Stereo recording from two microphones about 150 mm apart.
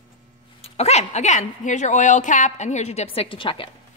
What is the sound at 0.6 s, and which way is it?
A woman's voice, 45° left (ahead or behind).